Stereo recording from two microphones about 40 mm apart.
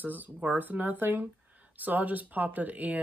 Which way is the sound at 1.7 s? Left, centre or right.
Right.